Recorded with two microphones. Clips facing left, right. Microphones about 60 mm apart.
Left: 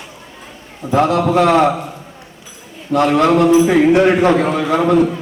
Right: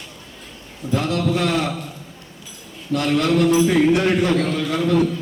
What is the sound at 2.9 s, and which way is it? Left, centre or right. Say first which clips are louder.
Speech: left 6 dB; left.